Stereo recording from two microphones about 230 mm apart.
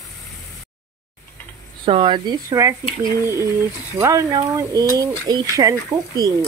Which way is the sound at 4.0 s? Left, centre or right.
Centre.